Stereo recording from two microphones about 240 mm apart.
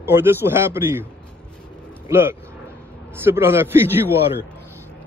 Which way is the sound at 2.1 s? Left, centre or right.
Centre.